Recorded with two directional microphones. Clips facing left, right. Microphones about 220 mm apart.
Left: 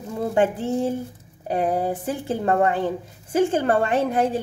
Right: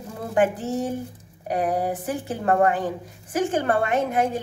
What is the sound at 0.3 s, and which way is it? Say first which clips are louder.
A woman's voice: even; 25° left (ahead or behind).